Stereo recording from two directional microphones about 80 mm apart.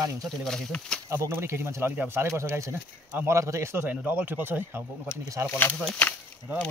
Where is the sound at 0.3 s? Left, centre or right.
Centre.